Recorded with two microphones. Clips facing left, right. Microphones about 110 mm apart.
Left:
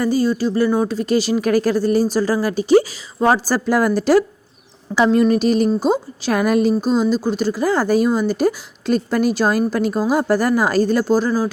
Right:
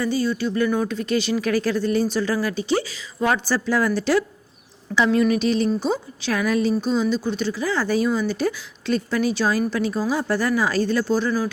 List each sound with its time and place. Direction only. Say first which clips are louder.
0.0 s a woman's voice: left 5 dB; 40° left (ahead or behind)